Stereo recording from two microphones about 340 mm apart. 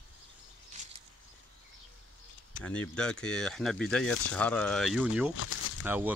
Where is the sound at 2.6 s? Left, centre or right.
Centre.